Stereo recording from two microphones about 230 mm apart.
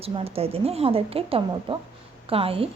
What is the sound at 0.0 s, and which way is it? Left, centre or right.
A woman's voice, right.